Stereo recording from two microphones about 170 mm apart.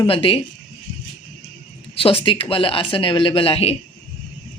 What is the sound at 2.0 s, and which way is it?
Speech, 35° left (ahead or behind).